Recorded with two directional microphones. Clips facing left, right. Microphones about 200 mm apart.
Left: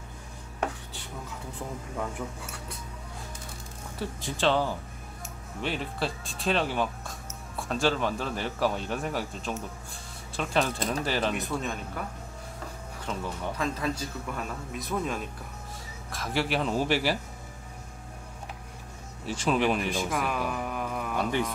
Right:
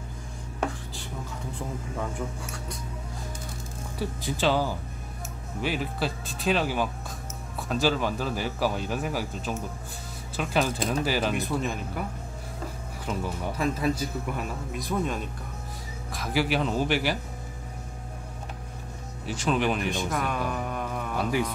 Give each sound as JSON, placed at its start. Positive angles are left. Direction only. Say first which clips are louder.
{"t": 4.0, "sound": "speech", "louder": "right 1 dB", "side_deg": -5}
{"t": 13.0, "sound": "speech", "louder": "right 2 dB", "side_deg": -10}
{"t": 19.2, "sound": "a man's voice", "louder": "even", "side_deg": 0}